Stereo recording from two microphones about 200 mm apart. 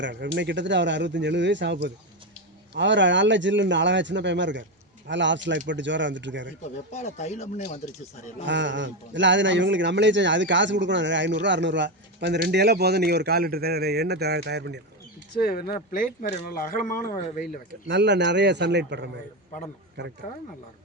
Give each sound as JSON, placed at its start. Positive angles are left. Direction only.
{"t": 0.0, "sound": "a man's voice", "side_deg": -60}
{"t": 6.9, "sound": "speech", "side_deg": 35}
{"t": 8.4, "sound": "a man's voice", "side_deg": -65}
{"t": 15.4, "sound": "speech", "side_deg": 50}
{"t": 17.8, "sound": "a man's voice", "side_deg": -60}